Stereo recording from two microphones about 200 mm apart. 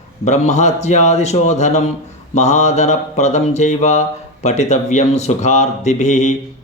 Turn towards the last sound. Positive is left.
turn(degrees=35)  # may be behind; listen again after turning